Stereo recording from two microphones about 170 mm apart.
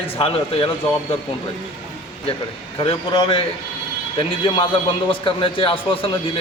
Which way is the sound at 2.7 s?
35° left (ahead or behind).